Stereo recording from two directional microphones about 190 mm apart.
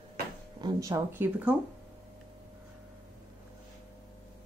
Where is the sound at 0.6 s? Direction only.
20° right (ahead or behind).